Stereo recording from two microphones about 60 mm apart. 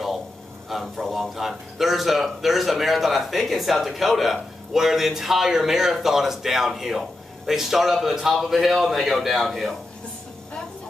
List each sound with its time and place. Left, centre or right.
0.7 s a man's voice: centre